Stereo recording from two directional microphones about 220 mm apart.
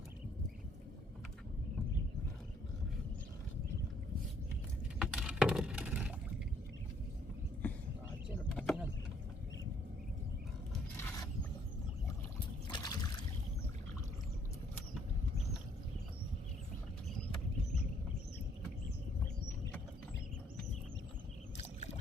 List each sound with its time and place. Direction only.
4.9 s computer keyboard: 5° right (ahead or behind)
7.6 s a sound: 5° left (ahead or behind)
8.5 s vehicle: centre (ahead or behind)
10.9 s a sound: 10° left (ahead or behind)
12.6 s boat: 20° left (ahead or behind)
21.6 s boat: 30° left (ahead or behind)